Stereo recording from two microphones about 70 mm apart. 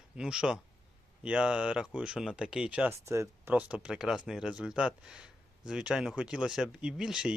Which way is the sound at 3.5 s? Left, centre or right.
Centre.